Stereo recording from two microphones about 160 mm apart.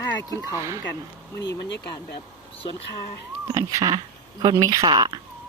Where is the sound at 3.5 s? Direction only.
25° right (ahead or behind).